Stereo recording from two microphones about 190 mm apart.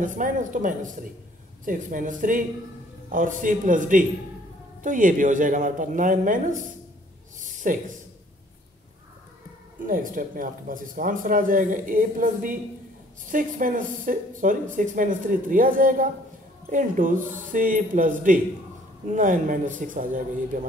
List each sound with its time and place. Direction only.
0.0 s speech: 45° right (ahead or behind)
7.3 s a sound: 40° right (ahead or behind)
9.8 s speech: 45° right (ahead or behind)